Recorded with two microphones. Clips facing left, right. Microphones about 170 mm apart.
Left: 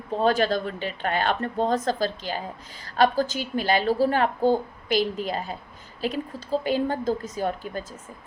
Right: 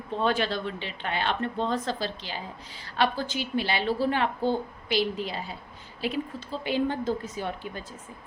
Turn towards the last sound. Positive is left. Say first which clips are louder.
# left 6 dB
turn(degrees=40)  # may be behind; listen again after turning